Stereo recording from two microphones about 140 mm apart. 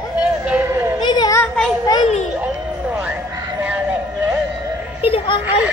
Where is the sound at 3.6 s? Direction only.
10° right (ahead or behind).